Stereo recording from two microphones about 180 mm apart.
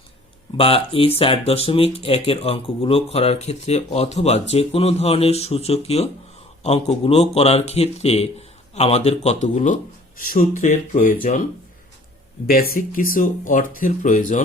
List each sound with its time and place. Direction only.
0.5 s speech: 30° left (ahead or behind)
12.5 s speech: 55° left (ahead or behind)